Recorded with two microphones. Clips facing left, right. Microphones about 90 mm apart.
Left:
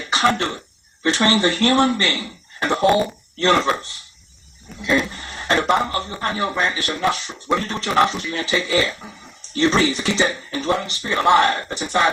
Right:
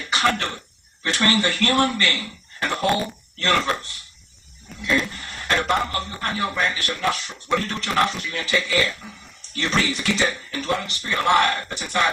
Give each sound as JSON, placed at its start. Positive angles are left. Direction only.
{"t": 0.1, "sound": "cough", "side_deg": 25}
{"t": 1.0, "sound": "a man's voice", "side_deg": 25}
{"t": 2.8, "sound": "speech", "side_deg": 5}
{"t": 3.3, "sound": "a man's voice", "side_deg": 25}
{"t": 5.1, "sound": "a man's voice", "side_deg": 25}